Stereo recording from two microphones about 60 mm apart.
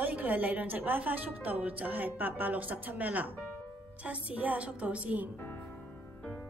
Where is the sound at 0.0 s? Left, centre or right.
Right.